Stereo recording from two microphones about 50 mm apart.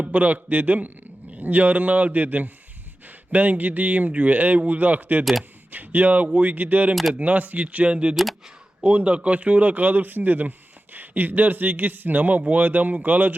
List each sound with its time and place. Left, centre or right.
0.0 s a man's voice: right
8.1 s speech: centre
8.8 s a man's voice: right